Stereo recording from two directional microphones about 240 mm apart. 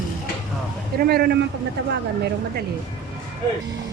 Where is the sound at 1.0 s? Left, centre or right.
Right.